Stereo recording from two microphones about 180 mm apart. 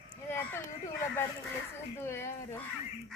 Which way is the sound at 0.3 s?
10° left (ahead or behind).